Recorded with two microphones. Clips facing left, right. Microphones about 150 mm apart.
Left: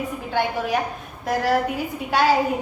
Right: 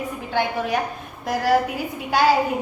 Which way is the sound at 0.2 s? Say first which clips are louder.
Right 1 dB; centre (ahead or behind).